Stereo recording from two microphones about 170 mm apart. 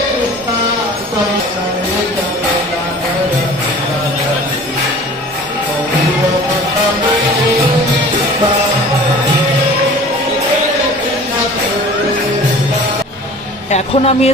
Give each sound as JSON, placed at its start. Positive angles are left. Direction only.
{"t": 13.7, "sound": "speech", "side_deg": 40}